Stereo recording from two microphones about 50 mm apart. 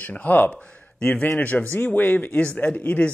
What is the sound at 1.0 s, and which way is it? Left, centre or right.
Speech, centre.